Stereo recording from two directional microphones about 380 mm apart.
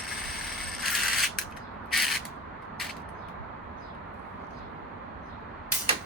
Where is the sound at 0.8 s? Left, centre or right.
Centre.